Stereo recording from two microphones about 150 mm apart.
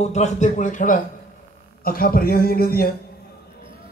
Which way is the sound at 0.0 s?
50° left (ahead or behind).